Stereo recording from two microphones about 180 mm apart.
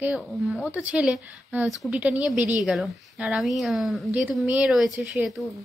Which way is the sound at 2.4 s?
20° left (ahead or behind).